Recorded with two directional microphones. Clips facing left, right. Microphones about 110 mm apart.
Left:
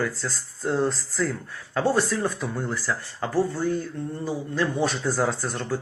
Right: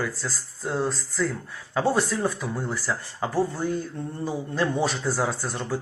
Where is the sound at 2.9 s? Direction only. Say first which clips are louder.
Even; 25° right (ahead or behind).